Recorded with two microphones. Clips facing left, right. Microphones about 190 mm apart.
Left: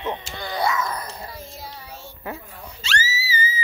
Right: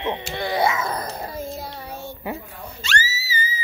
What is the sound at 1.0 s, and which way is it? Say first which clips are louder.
Child singing: right 7 dB; 55° right (ahead or behind).